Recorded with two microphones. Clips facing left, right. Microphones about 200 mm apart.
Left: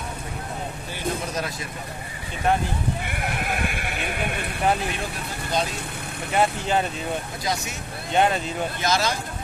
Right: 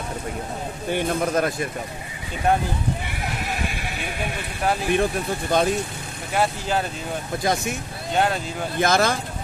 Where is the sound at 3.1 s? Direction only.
55° left (ahead or behind).